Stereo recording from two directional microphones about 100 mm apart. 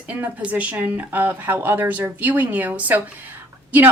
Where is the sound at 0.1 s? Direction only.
15° right (ahead or behind).